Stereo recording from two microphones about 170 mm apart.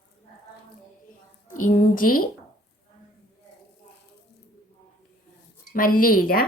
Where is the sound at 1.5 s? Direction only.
55° left (ahead or behind).